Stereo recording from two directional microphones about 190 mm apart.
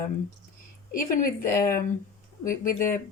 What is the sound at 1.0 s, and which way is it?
Speech, 45° left (ahead or behind).